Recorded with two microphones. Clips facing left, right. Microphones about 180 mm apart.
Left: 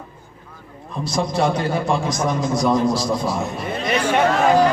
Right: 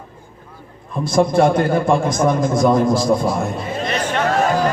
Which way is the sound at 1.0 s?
55° right (ahead or behind).